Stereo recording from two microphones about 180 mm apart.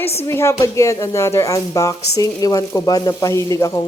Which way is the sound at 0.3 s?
15° left (ahead or behind).